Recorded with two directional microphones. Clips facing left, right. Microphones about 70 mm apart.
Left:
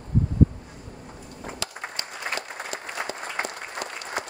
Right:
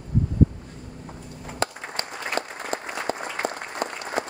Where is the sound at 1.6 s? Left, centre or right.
Right.